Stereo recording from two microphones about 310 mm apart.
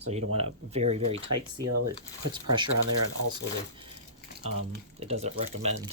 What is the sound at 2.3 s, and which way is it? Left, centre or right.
Speech, centre.